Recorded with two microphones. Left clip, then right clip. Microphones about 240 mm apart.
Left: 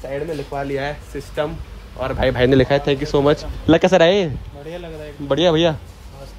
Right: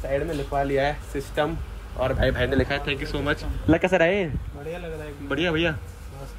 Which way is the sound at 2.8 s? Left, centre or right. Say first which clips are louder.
Left 10 dB; centre.